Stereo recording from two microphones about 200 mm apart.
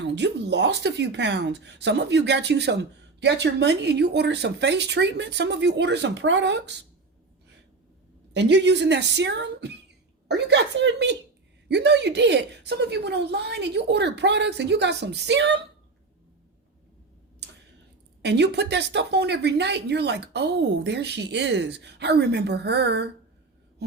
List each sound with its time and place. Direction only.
0.0 s speech: 60° right (ahead or behind)
8.3 s speech: 60° right (ahead or behind)
18.2 s speech: 60° right (ahead or behind)